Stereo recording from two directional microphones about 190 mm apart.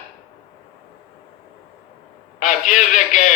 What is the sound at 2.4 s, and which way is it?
Speech, 40° left (ahead or behind).